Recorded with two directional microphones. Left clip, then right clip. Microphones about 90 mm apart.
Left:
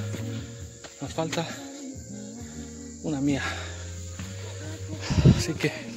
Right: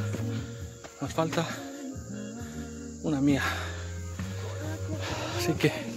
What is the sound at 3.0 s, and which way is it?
Speech, centre (ahead or behind).